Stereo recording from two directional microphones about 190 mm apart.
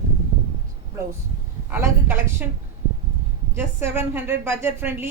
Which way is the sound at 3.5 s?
10° right (ahead or behind).